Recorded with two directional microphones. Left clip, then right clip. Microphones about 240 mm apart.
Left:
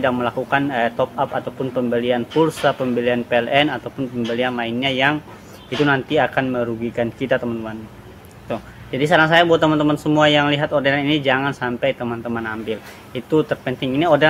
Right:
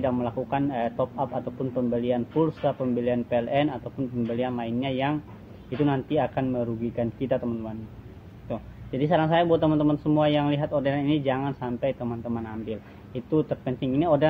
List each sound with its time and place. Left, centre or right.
0.0 s speech: centre
0.9 s a man's voice: left
1.9 s speech: centre
8.5 s speech: centre